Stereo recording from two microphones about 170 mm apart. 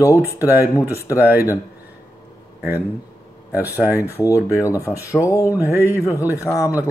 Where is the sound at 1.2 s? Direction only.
10° right (ahead or behind).